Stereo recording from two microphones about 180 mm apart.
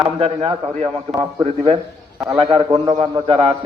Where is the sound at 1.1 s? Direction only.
20° right (ahead or behind).